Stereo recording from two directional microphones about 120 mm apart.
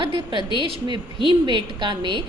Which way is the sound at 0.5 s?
45° right (ahead or behind).